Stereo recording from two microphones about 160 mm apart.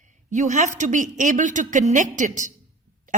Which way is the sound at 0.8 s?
50° right (ahead or behind).